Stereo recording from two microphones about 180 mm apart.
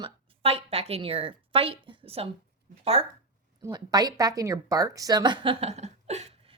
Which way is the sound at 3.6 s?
20° right (ahead or behind).